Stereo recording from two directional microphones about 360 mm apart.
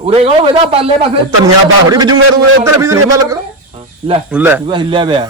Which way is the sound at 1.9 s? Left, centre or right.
Centre.